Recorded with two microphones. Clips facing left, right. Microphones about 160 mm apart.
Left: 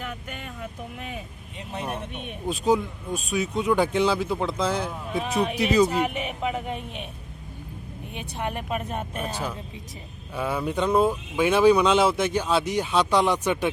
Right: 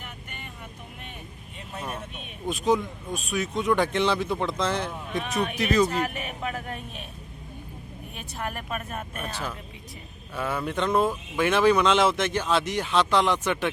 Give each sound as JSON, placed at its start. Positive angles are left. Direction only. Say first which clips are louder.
{"t": 0.1, "sound": "vehicle", "louder": "left 6 dB", "side_deg": 90}
{"t": 1.7, "sound": "speech", "louder": "left 3 dB", "side_deg": 15}
{"t": 3.3, "sound": "speech", "louder": "left 1 dB", "side_deg": 10}
{"t": 5.2, "sound": "speech", "louder": "left 4 dB", "side_deg": 30}
{"t": 5.5, "sound": "speech", "louder": "left 2 dB", "side_deg": 10}
{"t": 8.4, "sound": "speech", "louder": "left 3 dB", "side_deg": 20}
{"t": 9.3, "sound": "speech", "louder": "left 3 dB", "side_deg": 15}